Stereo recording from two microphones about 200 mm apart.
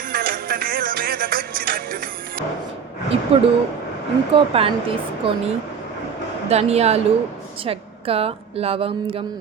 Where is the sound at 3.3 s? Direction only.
30° right (ahead or behind).